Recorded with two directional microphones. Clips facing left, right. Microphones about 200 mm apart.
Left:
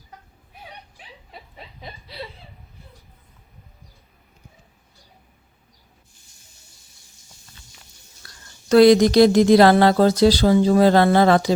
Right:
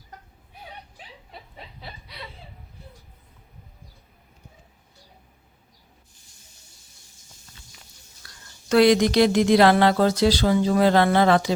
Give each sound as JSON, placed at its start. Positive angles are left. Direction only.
{"t": 1.8, "sound": "chuckle", "side_deg": 30}
{"t": 8.7, "sound": "speech", "side_deg": 40}